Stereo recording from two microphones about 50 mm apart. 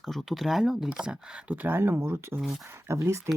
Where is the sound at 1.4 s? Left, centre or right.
Right.